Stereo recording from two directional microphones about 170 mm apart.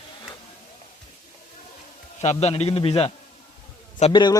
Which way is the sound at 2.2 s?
40° left (ahead or behind).